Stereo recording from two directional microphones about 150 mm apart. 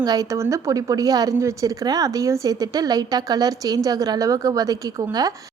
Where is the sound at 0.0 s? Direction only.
25° right (ahead or behind).